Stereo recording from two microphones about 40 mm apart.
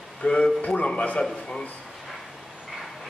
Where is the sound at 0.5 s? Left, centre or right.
Left.